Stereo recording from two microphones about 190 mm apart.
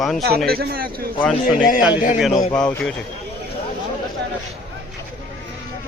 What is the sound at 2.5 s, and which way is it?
Speech, 5° left (ahead or behind).